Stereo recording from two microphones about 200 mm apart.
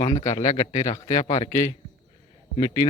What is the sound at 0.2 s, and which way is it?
A man's voice, 35° left (ahead or behind).